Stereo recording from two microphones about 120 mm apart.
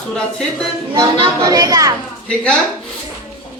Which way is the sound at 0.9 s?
40° right (ahead or behind).